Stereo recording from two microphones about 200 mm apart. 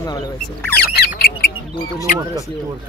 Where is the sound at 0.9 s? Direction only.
50° left (ahead or behind).